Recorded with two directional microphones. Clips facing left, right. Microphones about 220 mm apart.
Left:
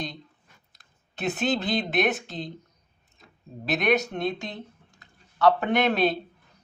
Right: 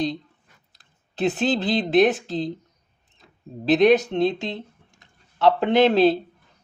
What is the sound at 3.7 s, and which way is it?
Speech, 30° right (ahead or behind).